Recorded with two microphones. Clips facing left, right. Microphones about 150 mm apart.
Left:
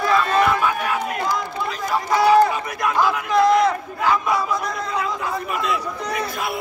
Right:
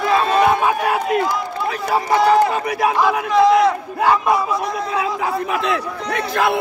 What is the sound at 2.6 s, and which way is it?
Speech, 70° right (ahead or behind).